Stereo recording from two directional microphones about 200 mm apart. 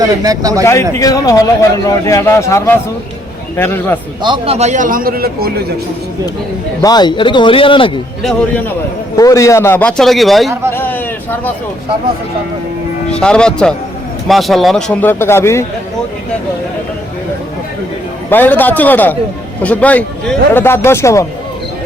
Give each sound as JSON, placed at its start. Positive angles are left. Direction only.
{"t": 0.0, "sound": "speech", "side_deg": -20}
{"t": 0.6, "sound": "speech", "side_deg": 15}
{"t": 4.2, "sound": "a man's voice", "side_deg": -25}
{"t": 6.8, "sound": "speech", "side_deg": 20}
{"t": 8.2, "sound": "speech", "side_deg": 0}
{"t": 9.1, "sound": "speech", "side_deg": 15}
{"t": 10.7, "sound": "a sound", "side_deg": 10}
{"t": 13.1, "sound": "speech", "side_deg": 5}
{"t": 18.3, "sound": "speech", "side_deg": 10}